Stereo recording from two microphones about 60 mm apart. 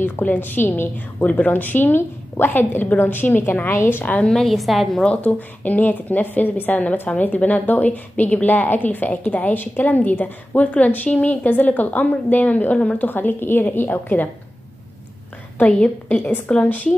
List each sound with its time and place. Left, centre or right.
0.0 s a woman's voice: left
4.0 s a woman's voice: left
4.3 s a woman's voice: centre
5.0 s a woman's voice: left
13.1 s a woman's voice: left
15.5 s a woman's voice: left
16.2 s a woman's voice: left
16.4 s a woman's voice: left